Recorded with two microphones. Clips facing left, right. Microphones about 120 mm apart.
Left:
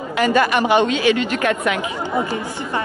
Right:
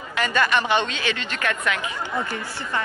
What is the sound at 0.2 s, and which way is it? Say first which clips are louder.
Speech: left 5 dB; 15° left (ahead or behind).